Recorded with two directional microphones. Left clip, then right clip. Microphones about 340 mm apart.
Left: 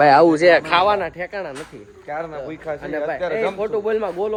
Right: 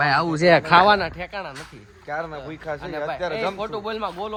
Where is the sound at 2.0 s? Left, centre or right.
Right.